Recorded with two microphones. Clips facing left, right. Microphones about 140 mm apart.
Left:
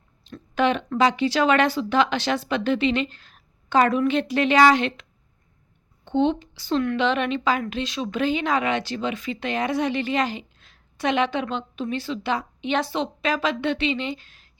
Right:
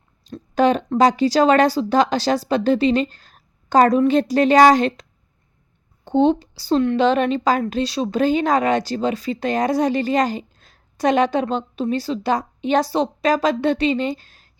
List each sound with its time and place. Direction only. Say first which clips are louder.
0.3 s a woman's voice: right 5 dB; 40° right (ahead or behind)
6.1 s a woman's voice: right 5 dB; 35° right (ahead or behind)